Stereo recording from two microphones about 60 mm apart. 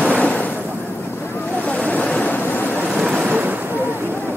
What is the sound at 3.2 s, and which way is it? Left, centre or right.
Ocean, right.